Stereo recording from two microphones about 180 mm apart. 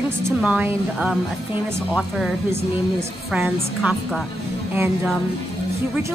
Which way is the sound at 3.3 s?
5° right (ahead or behind).